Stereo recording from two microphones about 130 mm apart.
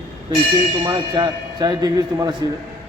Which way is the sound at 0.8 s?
35° right (ahead or behind).